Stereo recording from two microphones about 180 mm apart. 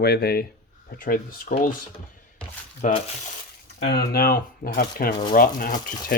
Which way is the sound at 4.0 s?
55° left (ahead or behind).